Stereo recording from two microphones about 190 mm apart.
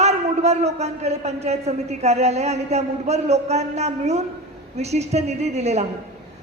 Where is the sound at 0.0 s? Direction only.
35° right (ahead or behind).